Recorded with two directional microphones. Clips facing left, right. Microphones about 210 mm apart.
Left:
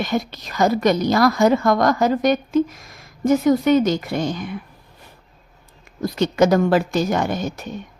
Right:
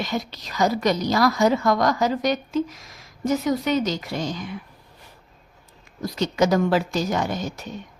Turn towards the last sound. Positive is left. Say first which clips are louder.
# left 4 dB
turn(degrees=55)  # may be behind; listen again after turning